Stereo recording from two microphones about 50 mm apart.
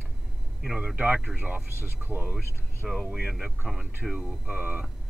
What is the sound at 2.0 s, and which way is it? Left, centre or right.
Speech, right.